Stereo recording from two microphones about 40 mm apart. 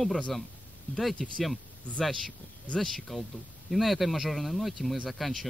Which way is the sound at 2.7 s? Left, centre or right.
Centre.